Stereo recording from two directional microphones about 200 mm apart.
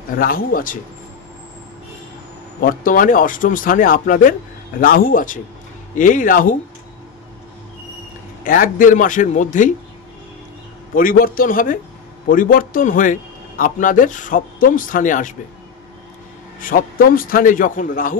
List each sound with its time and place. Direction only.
0.2 s speech: 45° left (ahead or behind)
2.6 s a man's voice: 45° left (ahead or behind)
8.5 s a man's voice: 45° left (ahead or behind)
11.0 s a man's voice: 45° left (ahead or behind)
16.5 s speech: 45° left (ahead or behind)